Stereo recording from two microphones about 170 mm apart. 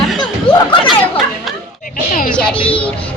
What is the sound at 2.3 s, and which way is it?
Speech, 5° left (ahead or behind).